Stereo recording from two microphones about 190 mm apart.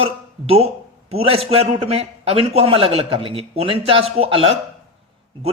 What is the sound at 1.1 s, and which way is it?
A man's voice, 30° right (ahead or behind).